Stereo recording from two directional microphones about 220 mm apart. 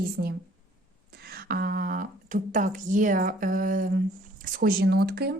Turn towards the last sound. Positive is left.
turn(degrees=-45)  # may be behind; listen again after turning